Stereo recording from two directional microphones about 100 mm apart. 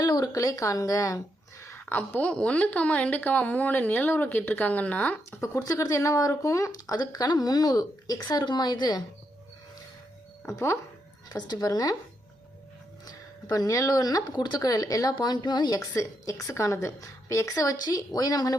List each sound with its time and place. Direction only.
0.0 s speech: 40° left (ahead or behind)
1.9 s a woman's voice: 20° left (ahead or behind)
5.4 s speech: 30° left (ahead or behind)
10.4 s speech: 25° left (ahead or behind)
11.3 s speech: 45° left (ahead or behind)
13.1 s speech: 35° left (ahead or behind)